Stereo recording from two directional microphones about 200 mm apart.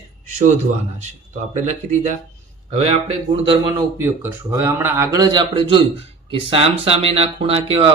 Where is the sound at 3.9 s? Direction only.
15° right (ahead or behind).